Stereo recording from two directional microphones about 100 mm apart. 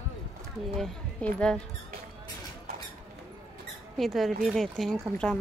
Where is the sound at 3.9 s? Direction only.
Centre (ahead or behind).